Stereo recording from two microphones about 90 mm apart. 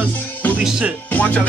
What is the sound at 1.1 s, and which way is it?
Music, 15° left (ahead or behind).